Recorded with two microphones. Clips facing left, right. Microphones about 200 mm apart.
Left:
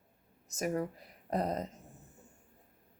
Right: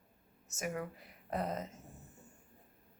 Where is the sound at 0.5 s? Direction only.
35° left (ahead or behind).